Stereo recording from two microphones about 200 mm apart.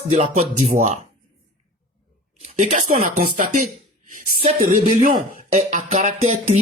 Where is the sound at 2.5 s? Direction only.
40° right (ahead or behind).